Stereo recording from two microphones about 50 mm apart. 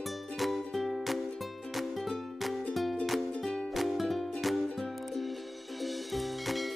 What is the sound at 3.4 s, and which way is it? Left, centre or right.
Music, centre.